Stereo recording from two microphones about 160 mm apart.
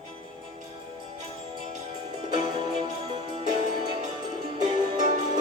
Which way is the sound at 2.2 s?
30° right (ahead or behind).